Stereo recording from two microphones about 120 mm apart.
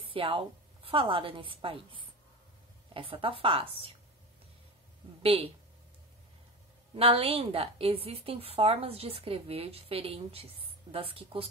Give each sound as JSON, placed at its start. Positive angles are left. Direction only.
{"t": 0.1, "sound": "a woman's voice", "side_deg": -50}
{"t": 5.2, "sound": "speech", "side_deg": -50}
{"t": 7.0, "sound": "a woman's voice", "side_deg": -50}